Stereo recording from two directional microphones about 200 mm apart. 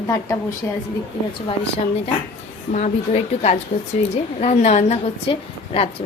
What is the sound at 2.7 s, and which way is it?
A woman's voice, 35° left (ahead or behind).